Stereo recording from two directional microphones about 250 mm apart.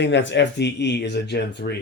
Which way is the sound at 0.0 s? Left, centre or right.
Left.